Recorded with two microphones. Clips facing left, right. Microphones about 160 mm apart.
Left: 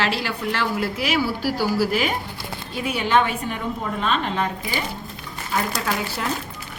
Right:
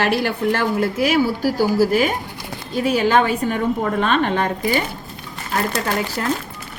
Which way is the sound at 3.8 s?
55° right (ahead or behind).